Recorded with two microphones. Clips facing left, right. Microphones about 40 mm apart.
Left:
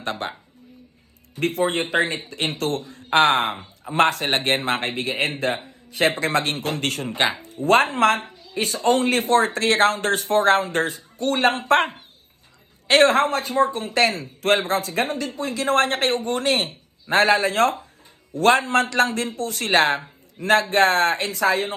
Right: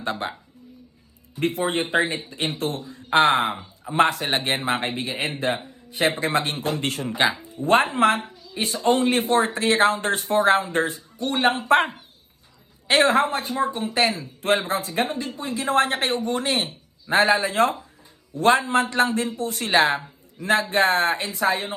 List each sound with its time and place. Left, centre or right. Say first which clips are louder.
1.4 s speech: left 1 dB; left
5.6 s a sound: left 2 dB; left
6.2 s speech: left 1 dB; left
7.2 s speech: right 1 dB; left
7.4 s speech: left 4 dB; left
11.2 s speech: left 2 dB; centre
11.4 s speech: even; left